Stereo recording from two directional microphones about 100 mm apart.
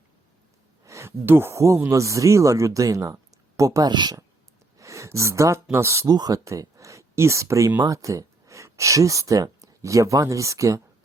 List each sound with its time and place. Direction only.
0.9 s speech: 25° right (ahead or behind); by 4.2 s 45° right (ahead or behind)
4.8 s speech: 30° right (ahead or behind)
6.1 s speech: 40° right (ahead or behind)